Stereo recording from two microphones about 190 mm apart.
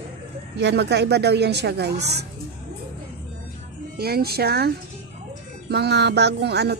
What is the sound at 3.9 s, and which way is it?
A woman's voice, 55° right (ahead or behind).